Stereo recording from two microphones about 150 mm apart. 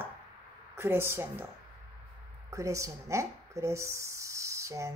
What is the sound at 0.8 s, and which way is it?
Speech, 15° right (ahead or behind).